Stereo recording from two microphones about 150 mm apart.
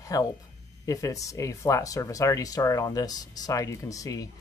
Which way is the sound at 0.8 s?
20° left (ahead or behind).